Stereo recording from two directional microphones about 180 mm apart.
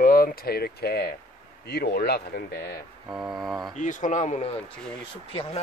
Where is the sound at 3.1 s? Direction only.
5° right (ahead or behind).